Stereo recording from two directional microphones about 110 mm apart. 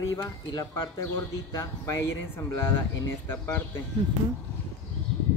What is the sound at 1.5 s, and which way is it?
Speech, 25° left (ahead or behind).